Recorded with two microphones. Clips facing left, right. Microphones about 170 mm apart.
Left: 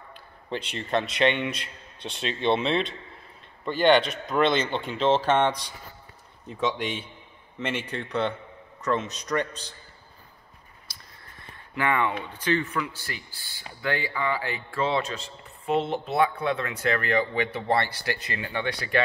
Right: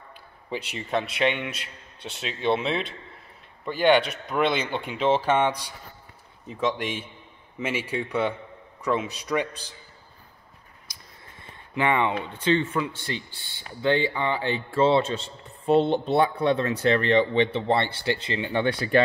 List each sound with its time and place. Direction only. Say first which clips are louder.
0.5 s a man's voice: left 1 dB; 5° right (ahead or behind)
10.9 s a sound: even; 15° right (ahead or behind)
11.7 s a man's voice: right 2 dB; 20° right (ahead or behind)